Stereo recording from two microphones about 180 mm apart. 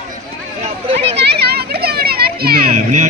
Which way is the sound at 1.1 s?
65° right (ahead or behind).